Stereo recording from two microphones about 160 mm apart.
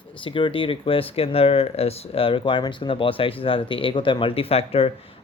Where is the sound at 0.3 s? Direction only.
35° left (ahead or behind).